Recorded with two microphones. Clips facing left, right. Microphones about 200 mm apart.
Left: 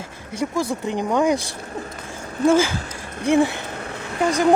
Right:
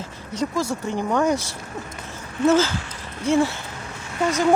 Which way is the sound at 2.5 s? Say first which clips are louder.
Left 1 dB; 10° left (ahead or behind).